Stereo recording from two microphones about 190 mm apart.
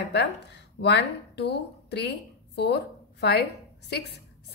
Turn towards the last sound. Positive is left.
turn(degrees=60)  # may be behind; listen again after turning